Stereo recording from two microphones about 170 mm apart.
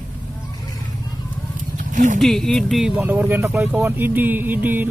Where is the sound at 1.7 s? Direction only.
50° right (ahead or behind).